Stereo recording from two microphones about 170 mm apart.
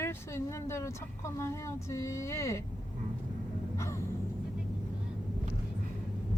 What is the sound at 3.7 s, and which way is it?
Music, 15° left (ahead or behind).